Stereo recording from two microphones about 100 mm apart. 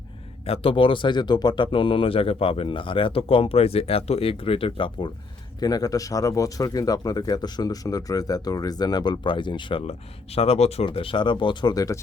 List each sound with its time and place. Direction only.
0.4 s speech: 70° left (ahead or behind)
5.5 s speech: 40° left (ahead or behind)
10.3 s speech: 85° left; by 11.7 s 55° left (ahead or behind)
11.7 s speech: 35° left (ahead or behind)